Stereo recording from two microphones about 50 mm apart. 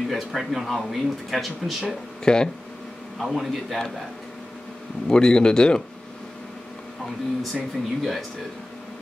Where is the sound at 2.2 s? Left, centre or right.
Centre.